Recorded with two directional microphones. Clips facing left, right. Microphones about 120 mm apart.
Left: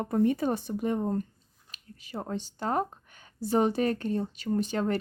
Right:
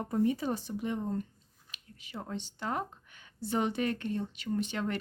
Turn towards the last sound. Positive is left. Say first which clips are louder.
# left 5 dB
turn(degrees=40)  # may be behind; listen again after turning